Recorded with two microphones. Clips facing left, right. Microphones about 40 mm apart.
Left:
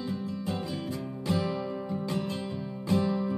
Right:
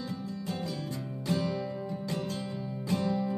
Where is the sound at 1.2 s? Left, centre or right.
Centre.